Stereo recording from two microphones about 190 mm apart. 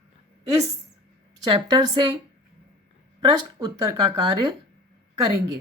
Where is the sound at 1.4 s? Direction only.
25° right (ahead or behind).